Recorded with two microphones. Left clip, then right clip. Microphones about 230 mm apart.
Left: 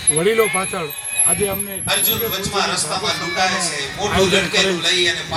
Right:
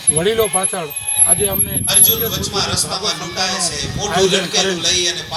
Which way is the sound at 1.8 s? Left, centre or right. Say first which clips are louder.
Right 1 dB; right.